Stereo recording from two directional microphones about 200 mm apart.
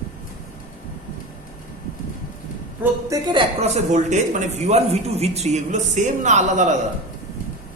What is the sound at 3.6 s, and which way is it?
Speech, 35° right (ahead or behind).